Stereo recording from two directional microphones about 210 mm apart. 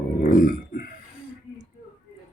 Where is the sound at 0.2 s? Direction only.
40° left (ahead or behind).